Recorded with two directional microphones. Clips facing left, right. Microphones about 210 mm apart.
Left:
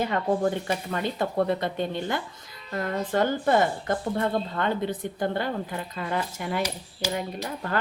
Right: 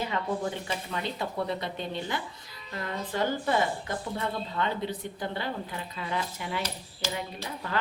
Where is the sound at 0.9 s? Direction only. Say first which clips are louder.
Left 5 dB; 50° left (ahead or behind).